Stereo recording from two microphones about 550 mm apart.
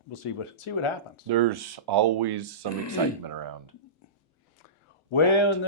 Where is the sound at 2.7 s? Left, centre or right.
Left.